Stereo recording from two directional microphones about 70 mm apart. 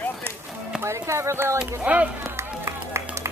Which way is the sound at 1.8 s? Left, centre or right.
Centre.